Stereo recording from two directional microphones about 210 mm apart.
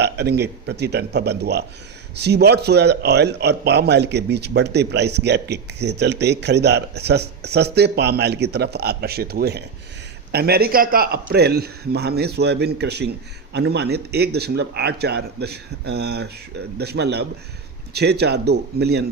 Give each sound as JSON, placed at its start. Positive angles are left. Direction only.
{"t": 0.0, "sound": "a man's voice", "side_deg": -50}